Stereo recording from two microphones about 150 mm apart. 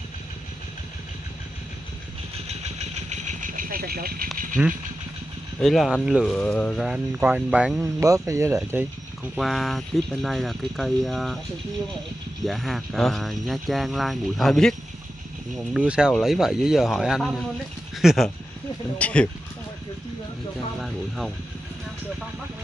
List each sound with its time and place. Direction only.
3.1 s vehicle: 55° right (ahead or behind); by 4.3 s 85° right
4.6 s speech: 5° right (ahead or behind); by 6.8 s 10° left (ahead or behind)
6.8 s speech: 5° right (ahead or behind)
8.0 s speech: 20° right (ahead or behind)
9.2 s speech: centre (ahead or behind)
12.4 s speech: centre (ahead or behind)